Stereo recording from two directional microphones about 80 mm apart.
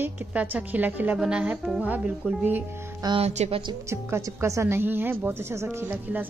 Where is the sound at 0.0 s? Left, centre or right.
Centre.